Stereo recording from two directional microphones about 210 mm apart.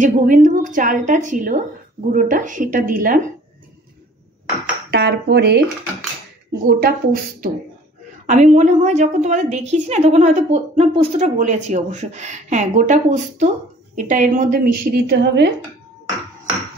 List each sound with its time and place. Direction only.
0.0 s speech: 40° right (ahead or behind)
4.9 s a woman's voice: 50° right (ahead or behind)
8.3 s a woman's voice: 35° right (ahead or behind); by 15.5 s 55° right (ahead or behind)